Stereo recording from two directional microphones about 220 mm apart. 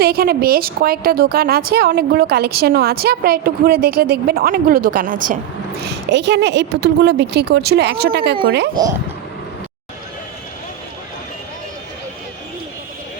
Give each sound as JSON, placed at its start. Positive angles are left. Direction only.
{"t": 0.0, "sound": "a woman's voice", "side_deg": -45}
{"t": 5.8, "sound": "a woman's voice", "side_deg": -50}